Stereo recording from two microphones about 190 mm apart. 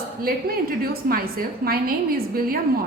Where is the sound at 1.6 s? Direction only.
50° right (ahead or behind).